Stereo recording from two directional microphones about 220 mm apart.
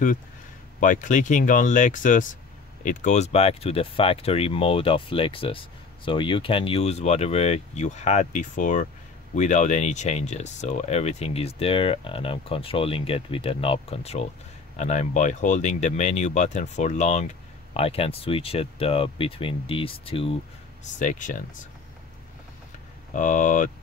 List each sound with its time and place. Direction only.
0.7 s speech: 35° left (ahead or behind)
21.0 s speech: 35° left (ahead or behind)
23.1 s speech: 35° left (ahead or behind)